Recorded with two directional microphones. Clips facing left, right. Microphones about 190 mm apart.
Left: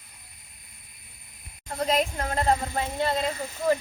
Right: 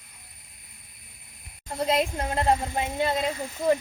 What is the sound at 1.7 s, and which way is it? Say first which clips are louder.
A woman's voice: right 1 dB; 15° right (ahead or behind).